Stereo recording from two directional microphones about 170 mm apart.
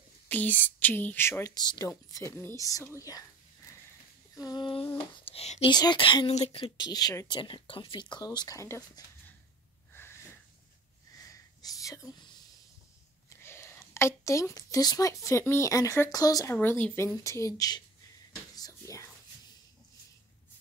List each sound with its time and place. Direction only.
0.3 s speech: 10° left (ahead or behind)
4.4 s speech: 25° left (ahead or behind)
5.7 s speech: 25° left (ahead or behind)
9.9 s a sound: 15° left (ahead or behind)
11.6 s speech: 20° left (ahead or behind)
13.3 s a woman's voice: 15° left (ahead or behind)
16.5 s speech: 10° left (ahead or behind)
18.6 s whispering: 20° left (ahead or behind)